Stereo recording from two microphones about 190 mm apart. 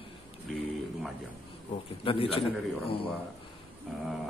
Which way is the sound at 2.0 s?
30° left (ahead or behind).